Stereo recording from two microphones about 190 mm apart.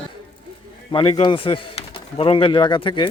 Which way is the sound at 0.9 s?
25° left (ahead or behind).